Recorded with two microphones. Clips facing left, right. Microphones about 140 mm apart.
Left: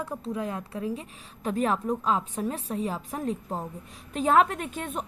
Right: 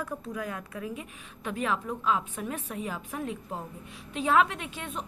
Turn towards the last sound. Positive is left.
turn(degrees=45)  # may be behind; listen again after turning